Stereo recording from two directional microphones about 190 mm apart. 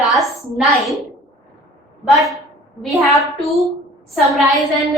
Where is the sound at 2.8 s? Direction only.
Centre (ahead or behind).